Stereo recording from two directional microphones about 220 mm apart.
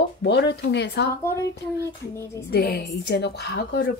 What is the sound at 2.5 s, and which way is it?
A woman's voice, 45° left (ahead or behind).